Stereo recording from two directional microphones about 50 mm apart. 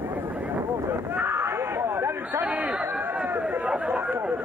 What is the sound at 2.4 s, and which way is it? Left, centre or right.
Chatter, right.